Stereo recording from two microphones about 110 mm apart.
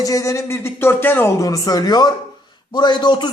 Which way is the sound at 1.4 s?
35° left (ahead or behind).